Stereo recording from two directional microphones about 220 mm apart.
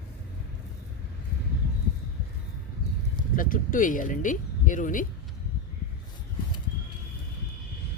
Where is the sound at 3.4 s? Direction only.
35° left (ahead or behind).